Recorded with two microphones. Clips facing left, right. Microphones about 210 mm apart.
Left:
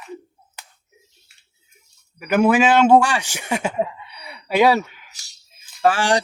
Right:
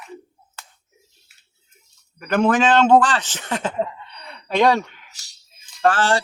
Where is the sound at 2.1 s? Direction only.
10° left (ahead or behind).